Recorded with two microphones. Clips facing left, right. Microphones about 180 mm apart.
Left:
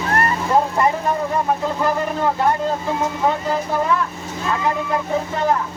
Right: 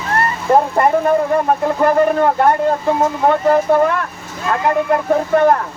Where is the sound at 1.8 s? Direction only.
55° right (ahead or behind).